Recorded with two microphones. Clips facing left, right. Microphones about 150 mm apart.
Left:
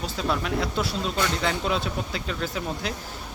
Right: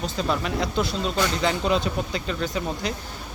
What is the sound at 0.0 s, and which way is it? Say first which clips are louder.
Speech: right 2 dB; 5° left (ahead or behind).